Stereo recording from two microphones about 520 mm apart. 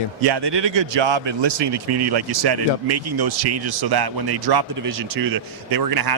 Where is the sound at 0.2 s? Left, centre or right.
Right.